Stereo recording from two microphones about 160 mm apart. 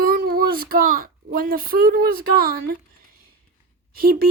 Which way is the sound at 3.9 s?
70° right (ahead or behind).